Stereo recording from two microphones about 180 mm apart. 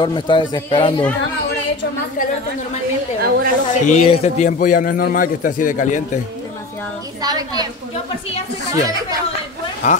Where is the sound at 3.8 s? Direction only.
40° left (ahead or behind).